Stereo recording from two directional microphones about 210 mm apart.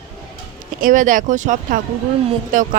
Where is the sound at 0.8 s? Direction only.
40° right (ahead or behind).